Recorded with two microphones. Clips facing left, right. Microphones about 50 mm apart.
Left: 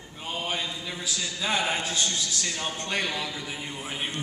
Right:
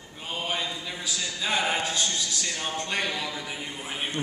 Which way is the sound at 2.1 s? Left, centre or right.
Centre.